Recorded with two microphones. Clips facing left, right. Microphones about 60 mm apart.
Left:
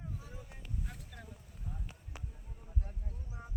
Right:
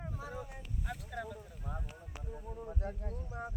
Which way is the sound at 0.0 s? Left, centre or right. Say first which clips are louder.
Right 6 dB; right.